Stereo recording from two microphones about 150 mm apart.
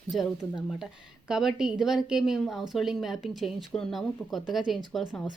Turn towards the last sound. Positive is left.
turn(degrees=0)  # may be behind; listen again after turning